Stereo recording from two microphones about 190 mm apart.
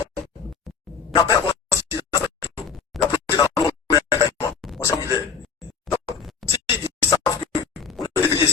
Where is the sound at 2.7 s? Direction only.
Centre (ahead or behind).